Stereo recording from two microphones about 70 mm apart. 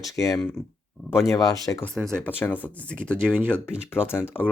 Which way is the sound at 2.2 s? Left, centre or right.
Left.